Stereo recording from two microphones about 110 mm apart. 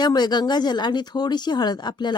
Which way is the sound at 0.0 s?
40° left (ahead or behind).